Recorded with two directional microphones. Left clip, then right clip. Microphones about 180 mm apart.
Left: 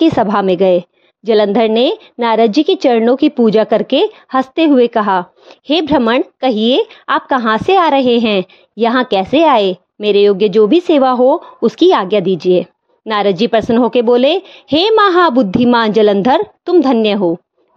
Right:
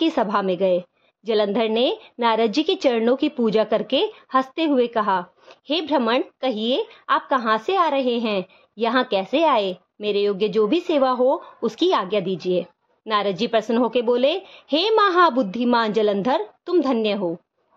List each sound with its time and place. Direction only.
0.0 s a woman's voice: 40° left (ahead or behind)